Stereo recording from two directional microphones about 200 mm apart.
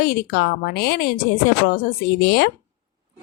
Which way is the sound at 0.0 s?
50° left (ahead or behind).